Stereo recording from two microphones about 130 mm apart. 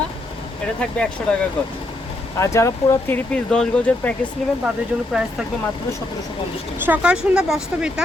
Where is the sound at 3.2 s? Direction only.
5° left (ahead or behind).